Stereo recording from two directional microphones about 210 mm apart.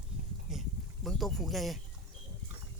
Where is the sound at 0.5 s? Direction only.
Centre (ahead or behind).